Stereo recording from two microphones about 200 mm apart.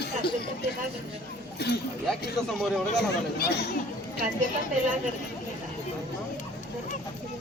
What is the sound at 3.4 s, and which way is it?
Speech, 55° left (ahead or behind).